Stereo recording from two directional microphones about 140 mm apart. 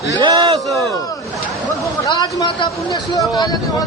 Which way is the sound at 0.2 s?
35° right (ahead or behind).